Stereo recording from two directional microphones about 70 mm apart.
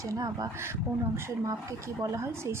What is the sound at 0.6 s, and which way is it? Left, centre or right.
A woman's voice, right.